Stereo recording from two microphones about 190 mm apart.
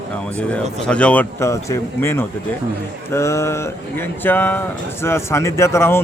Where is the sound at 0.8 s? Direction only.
5° left (ahead or behind).